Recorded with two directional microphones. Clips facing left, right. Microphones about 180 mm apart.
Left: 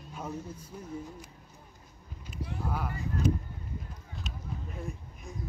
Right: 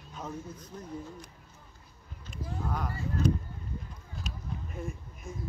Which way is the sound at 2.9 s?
15° left (ahead or behind).